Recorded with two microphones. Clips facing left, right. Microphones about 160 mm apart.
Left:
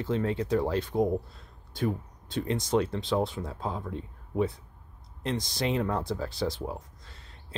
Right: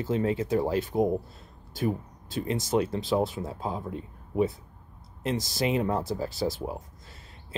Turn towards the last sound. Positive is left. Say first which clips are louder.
# right 1 dB
turn(degrees=-10)  # may be behind; listen again after turning